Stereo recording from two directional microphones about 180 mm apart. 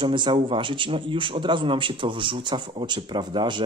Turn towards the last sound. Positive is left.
turn(degrees=-25)  # may be behind; listen again after turning